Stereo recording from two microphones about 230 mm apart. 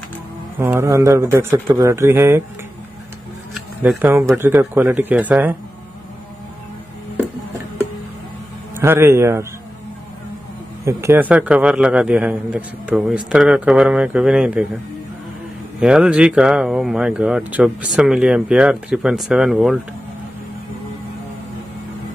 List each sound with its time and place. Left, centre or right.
0.6 s speech: centre
3.5 s speech: centre
8.7 s speech: centre
10.9 s speech: centre
15.8 s speech: centre